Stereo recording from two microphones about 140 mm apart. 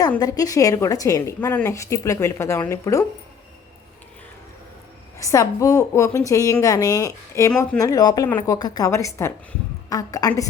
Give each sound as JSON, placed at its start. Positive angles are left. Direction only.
{"t": 0.2, "sound": "a woman's voice", "side_deg": 25}
{"t": 5.1, "sound": "a woman's voice", "side_deg": 25}